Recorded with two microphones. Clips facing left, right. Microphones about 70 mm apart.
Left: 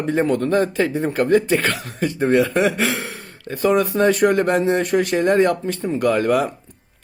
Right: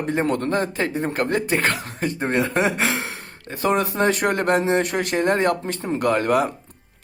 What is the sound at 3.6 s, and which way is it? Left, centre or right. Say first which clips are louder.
Speech: left 3 dB; right.